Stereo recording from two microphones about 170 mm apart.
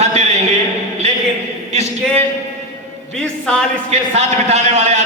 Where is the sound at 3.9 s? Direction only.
40° right (ahead or behind).